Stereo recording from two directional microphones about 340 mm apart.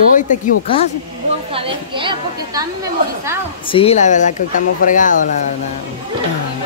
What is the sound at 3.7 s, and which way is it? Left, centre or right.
A man's voice, centre.